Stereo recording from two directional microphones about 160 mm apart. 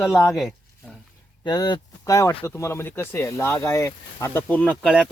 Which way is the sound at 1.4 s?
25° left (ahead or behind).